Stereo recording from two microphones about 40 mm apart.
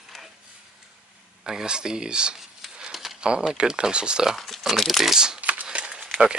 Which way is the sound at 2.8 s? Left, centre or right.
Centre.